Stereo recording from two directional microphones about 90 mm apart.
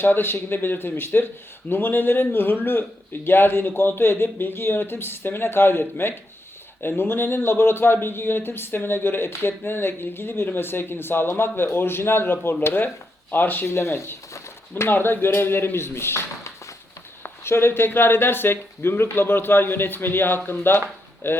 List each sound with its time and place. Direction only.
0.0 s speech: 25° left (ahead or behind)